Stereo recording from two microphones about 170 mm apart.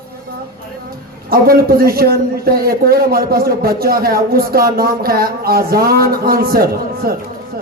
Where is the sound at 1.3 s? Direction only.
60° right (ahead or behind).